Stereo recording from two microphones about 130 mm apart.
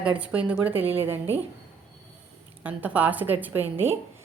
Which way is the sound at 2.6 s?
10° right (ahead or behind).